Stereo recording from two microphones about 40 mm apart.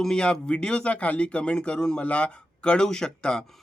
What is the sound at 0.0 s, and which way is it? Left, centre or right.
Speech, centre.